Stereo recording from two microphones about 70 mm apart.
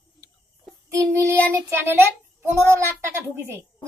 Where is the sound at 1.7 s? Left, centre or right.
Right.